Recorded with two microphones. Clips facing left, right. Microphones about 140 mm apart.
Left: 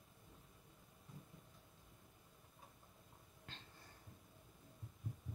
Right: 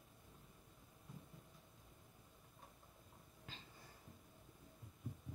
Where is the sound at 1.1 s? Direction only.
Centre (ahead or behind).